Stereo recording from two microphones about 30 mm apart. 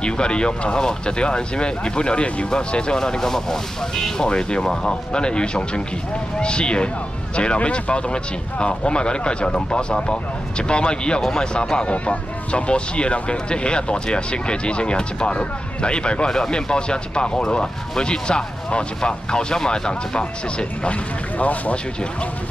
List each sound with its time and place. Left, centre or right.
0.0 s speech: left; by 4.1 s centre
4.2 s speech: left
11.1 s speech: centre
11.7 s speech: left
20.9 s speech: left